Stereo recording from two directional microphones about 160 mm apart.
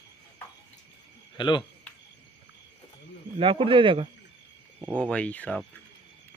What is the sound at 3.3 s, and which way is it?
Speech, 35° right (ahead or behind).